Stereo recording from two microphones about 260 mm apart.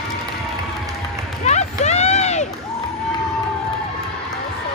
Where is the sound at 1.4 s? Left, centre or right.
Left.